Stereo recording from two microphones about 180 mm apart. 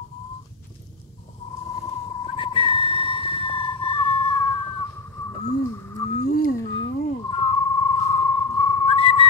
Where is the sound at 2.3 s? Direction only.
30° left (ahead or behind).